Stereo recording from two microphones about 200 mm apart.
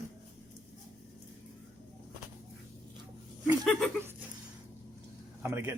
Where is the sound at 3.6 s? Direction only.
5° left (ahead or behind).